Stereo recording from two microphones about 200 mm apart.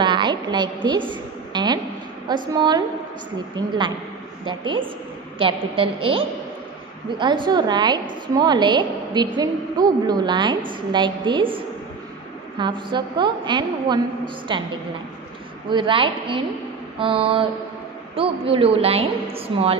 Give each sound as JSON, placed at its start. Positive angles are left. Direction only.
{"t": 0.0, "sound": "a sound", "side_deg": -25}
{"t": 2.2, "sound": "a woman's voice", "side_deg": -20}
{"t": 15.7, "sound": "a woman's voice", "side_deg": -25}